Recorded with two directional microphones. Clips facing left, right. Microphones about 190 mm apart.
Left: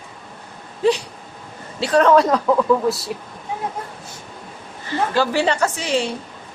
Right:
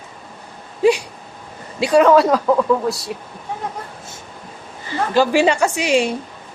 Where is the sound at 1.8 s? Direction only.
10° right (ahead or behind).